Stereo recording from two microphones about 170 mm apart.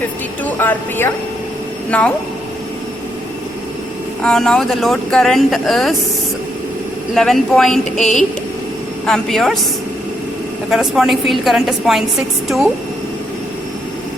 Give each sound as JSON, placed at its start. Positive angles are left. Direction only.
{"t": 0.4, "sound": "speech", "side_deg": 10}
{"t": 4.2, "sound": "speech", "side_deg": 5}
{"t": 7.1, "sound": "speech", "side_deg": 0}
{"t": 10.7, "sound": "speech", "side_deg": 0}